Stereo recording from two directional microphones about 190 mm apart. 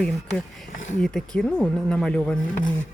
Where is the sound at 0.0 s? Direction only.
5° left (ahead or behind).